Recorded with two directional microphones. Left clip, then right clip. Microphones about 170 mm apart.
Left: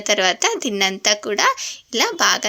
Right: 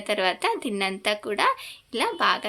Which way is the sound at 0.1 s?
30° left (ahead or behind).